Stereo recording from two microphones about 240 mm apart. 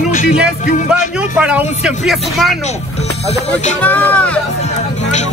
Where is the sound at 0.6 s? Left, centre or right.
Left.